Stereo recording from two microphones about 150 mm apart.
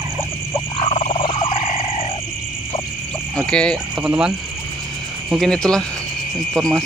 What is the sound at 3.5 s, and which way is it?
Cricket, 5° left (ahead or behind).